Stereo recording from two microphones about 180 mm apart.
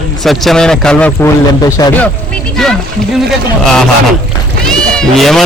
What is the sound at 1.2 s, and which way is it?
Speech, 20° left (ahead or behind).